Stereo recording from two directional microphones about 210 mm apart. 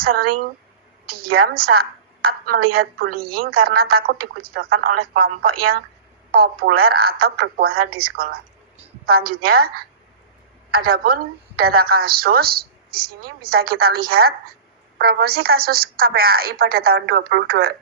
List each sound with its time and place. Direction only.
0.0 s a woman's voice: 45° right (ahead or behind)